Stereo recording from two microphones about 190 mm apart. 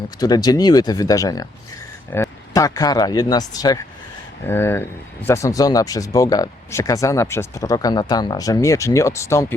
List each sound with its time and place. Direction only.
0.2 s speech: 20° left (ahead or behind)